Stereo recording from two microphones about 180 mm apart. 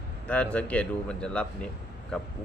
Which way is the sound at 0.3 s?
5° left (ahead or behind).